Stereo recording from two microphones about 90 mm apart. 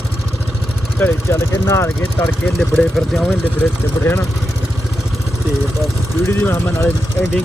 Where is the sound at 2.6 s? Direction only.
5° left (ahead or behind).